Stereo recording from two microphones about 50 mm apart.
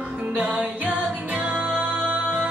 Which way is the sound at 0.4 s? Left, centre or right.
Right.